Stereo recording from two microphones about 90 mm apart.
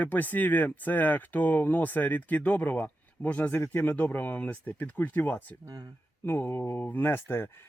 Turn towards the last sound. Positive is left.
turn(degrees=25)  # may be behind; listen again after turning